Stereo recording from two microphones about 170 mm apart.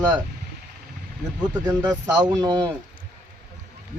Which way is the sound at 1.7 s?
15° right (ahead or behind).